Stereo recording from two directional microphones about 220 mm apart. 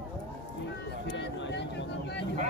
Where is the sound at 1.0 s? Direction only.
55° left (ahead or behind).